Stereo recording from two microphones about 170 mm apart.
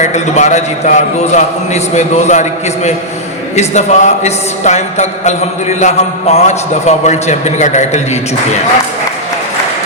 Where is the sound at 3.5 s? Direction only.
40° left (ahead or behind).